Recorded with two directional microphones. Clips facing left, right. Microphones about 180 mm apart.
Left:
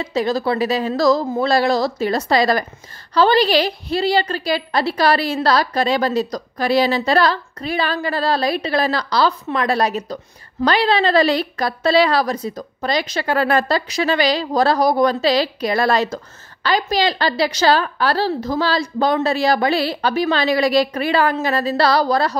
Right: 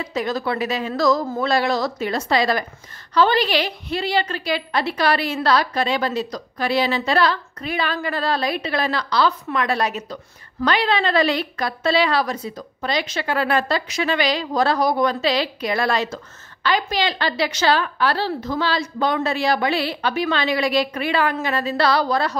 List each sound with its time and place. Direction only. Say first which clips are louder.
0.0 s a woman's voice: left 4 dB; 30° left (ahead or behind)